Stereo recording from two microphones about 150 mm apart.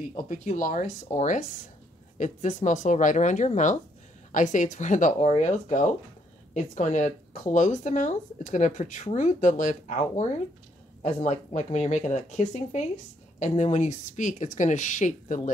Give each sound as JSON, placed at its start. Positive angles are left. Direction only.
{"t": 0.1, "sound": "speech", "side_deg": 55}